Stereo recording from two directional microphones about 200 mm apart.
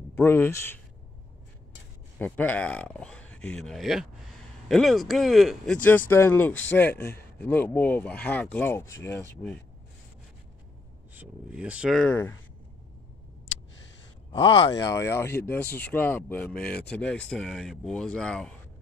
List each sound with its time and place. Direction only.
0.1 s speech: 10° left (ahead or behind)
2.1 s speech: 10° left (ahead or behind)
11.1 s speech: 5° right (ahead or behind); by 12.4 s 10° left (ahead or behind)
14.3 s speech: 25° left (ahead or behind)
14.7 s speech: 15° left (ahead or behind)